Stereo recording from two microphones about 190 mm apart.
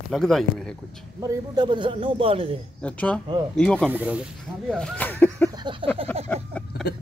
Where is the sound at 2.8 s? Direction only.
5° left (ahead or behind).